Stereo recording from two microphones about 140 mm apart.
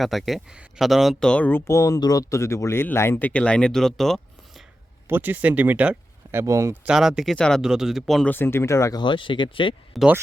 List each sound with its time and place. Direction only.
0.0 s speech: centre (ahead or behind)
5.0 s speech: 15° right (ahead or behind)
6.4 s speech: 20° right (ahead or behind)
6.8 s speech: 5° right (ahead or behind)
8.3 s speech: 15° left (ahead or behind)
9.0 s speech: 35° left (ahead or behind)
10.0 s speech: centre (ahead or behind)